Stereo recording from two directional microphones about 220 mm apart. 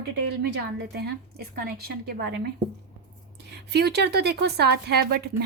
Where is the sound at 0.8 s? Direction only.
45° right (ahead or behind).